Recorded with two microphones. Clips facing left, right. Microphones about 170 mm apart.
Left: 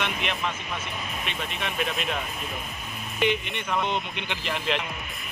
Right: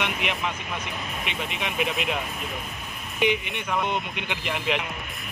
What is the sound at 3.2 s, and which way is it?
Speech, 10° right (ahead or behind).